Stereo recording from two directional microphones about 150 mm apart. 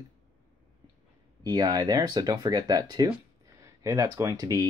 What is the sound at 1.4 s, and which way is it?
Speech, 25° right (ahead or behind).